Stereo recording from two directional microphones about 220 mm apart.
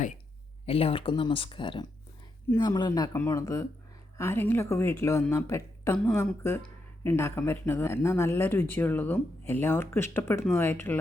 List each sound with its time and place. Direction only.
0.6 s speech: 25° left (ahead or behind); by 10.9 s 10° left (ahead or behind)